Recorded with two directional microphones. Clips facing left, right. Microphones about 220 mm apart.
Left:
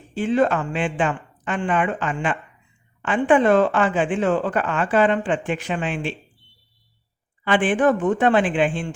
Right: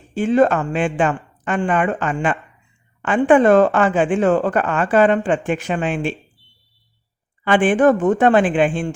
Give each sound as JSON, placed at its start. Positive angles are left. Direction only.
{"t": 0.1, "sound": "a woman's voice", "side_deg": -45}
{"t": 7.4, "sound": "a woman's voice", "side_deg": -45}